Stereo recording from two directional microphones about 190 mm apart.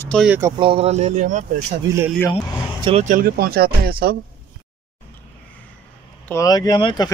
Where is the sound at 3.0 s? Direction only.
50° right (ahead or behind).